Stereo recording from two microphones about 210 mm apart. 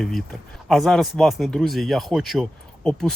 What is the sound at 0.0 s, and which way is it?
Speech, centre (ahead or behind).